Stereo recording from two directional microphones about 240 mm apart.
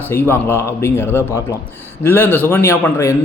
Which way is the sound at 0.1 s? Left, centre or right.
Centre.